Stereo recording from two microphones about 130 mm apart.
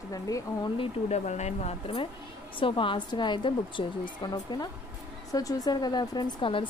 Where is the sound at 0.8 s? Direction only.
60° left (ahead or behind).